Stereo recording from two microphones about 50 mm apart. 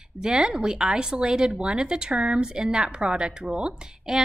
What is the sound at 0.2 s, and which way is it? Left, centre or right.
Speech, centre.